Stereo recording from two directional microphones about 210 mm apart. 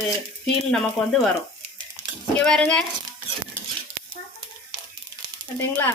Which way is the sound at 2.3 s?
5° left (ahead or behind).